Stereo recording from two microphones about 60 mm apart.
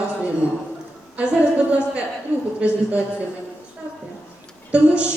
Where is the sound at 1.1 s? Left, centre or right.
Right.